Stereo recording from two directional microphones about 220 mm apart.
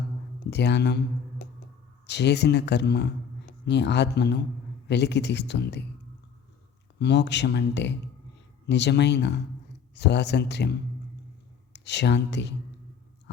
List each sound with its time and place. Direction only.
0.5 s speech: 50° left (ahead or behind)
2.0 s speech: 50° left (ahead or behind)
7.0 s speech: 50° left (ahead or behind)